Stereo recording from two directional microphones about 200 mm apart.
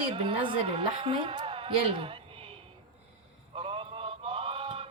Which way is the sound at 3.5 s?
30° right (ahead or behind).